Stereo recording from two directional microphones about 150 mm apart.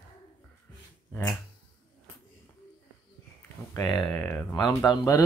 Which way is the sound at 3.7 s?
25° left (ahead or behind).